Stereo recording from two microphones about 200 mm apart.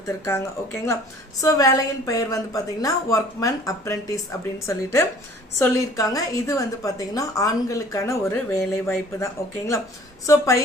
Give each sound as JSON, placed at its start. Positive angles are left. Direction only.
{"t": 0.3, "sound": "a woman's voice", "side_deg": 10}